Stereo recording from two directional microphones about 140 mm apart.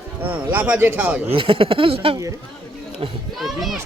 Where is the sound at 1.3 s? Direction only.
40° right (ahead or behind).